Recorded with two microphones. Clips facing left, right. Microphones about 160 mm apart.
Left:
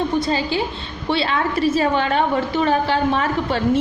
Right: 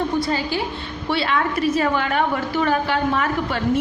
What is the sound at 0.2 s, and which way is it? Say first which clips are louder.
A woman's voice: left 2 dB; 25° left (ahead or behind).